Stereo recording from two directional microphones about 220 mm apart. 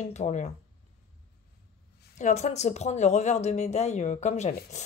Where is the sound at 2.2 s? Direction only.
30° left (ahead or behind).